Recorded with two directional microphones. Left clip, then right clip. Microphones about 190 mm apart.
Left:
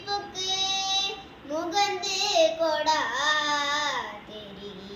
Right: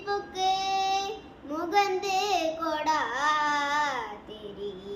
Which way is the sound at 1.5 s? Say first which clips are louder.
Even; 15° right (ahead or behind).